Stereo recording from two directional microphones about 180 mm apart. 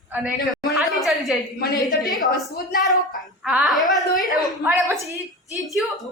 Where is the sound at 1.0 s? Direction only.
Centre (ahead or behind).